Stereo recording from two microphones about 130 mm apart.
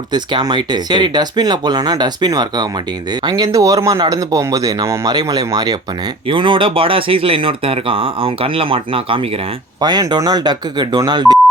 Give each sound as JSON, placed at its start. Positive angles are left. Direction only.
{"t": 0.1, "sound": "speech", "side_deg": -35}